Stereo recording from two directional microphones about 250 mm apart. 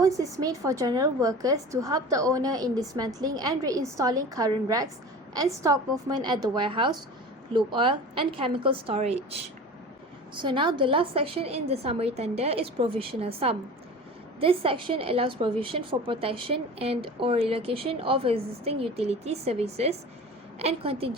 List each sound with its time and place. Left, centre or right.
0.0 s a woman's voice: centre
10.4 s a woman's voice: centre